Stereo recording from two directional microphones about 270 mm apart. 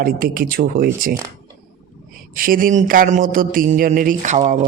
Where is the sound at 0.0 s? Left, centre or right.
Right.